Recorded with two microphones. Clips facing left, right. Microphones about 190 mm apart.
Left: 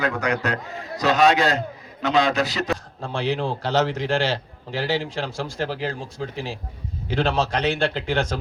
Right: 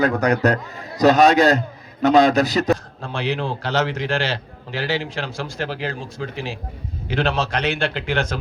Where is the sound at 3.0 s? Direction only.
70° right (ahead or behind).